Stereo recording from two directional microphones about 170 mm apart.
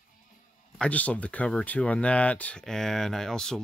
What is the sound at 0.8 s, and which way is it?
Speech, 10° left (ahead or behind).